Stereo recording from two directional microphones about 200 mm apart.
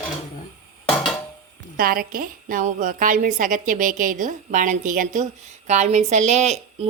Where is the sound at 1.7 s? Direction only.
45° right (ahead or behind).